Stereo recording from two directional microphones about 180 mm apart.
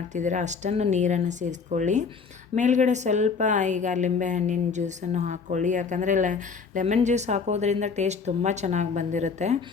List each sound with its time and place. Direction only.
0.1 s a woman's voice: 45° right (ahead or behind)